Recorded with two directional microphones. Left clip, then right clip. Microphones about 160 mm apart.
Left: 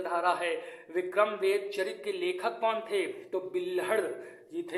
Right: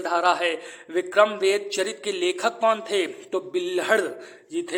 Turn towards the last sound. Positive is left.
turn(degrees=-35)  # may be behind; listen again after turning